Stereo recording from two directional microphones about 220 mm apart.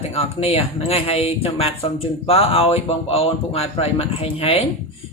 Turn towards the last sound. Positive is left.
turn(degrees=25)  # may be behind; listen again after turning